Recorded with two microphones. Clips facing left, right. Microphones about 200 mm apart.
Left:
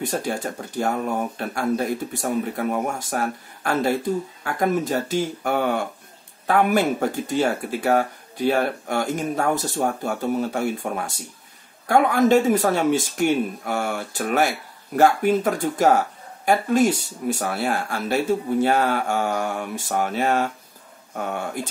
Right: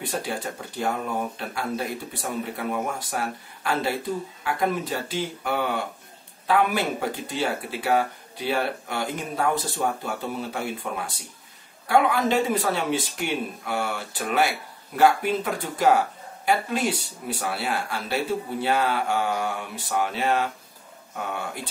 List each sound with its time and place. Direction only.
0.0 s speech: 45° left (ahead or behind)